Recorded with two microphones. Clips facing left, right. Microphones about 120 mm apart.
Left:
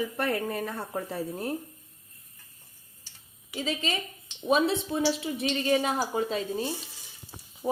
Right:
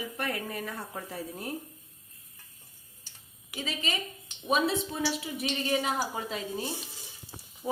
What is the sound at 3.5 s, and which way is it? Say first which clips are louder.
Stir: left 4 dB; 30° left (ahead or behind).